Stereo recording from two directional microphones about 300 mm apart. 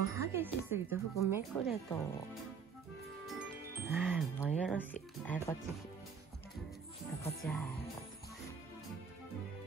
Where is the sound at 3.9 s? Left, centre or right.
Centre.